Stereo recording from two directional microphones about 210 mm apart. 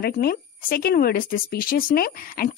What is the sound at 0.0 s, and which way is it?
Speech, 45° left (ahead or behind).